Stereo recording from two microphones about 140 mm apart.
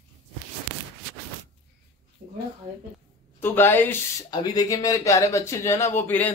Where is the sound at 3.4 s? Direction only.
15° left (ahead or behind).